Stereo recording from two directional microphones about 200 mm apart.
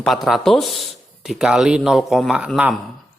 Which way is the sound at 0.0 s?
Centre (ahead or behind).